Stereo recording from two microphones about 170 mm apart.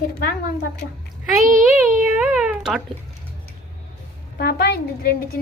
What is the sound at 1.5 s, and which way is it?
Speech, 50° right (ahead or behind).